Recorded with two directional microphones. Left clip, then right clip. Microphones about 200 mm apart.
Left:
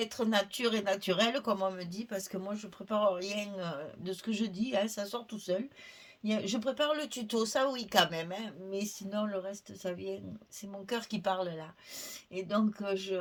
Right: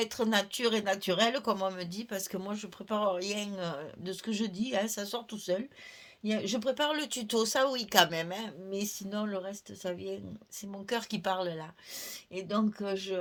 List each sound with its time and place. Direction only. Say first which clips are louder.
0.0 s speech: right 1 dB; 40° right (ahead or behind)